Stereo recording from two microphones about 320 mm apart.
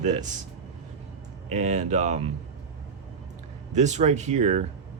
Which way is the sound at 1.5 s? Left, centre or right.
Right.